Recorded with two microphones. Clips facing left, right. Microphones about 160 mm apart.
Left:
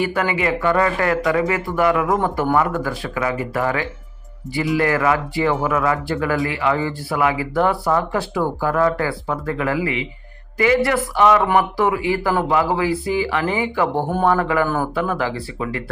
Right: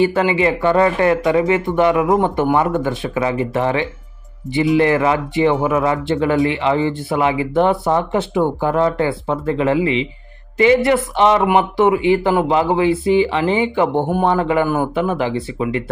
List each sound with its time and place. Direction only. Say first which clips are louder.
0.0 s speech: right 5 dB; 25° right (ahead or behind)